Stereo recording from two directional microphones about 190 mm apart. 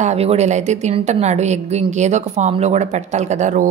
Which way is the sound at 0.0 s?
35° right (ahead or behind).